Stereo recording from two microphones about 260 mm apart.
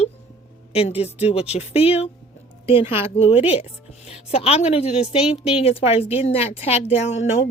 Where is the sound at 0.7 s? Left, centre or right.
Left.